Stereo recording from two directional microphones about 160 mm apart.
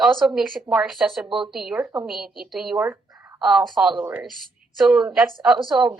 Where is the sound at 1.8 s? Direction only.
15° right (ahead or behind).